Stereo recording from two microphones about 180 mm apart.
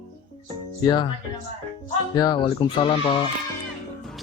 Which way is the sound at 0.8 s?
25° left (ahead or behind).